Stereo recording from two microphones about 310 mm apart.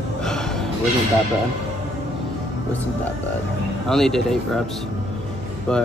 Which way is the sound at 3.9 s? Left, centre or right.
Centre.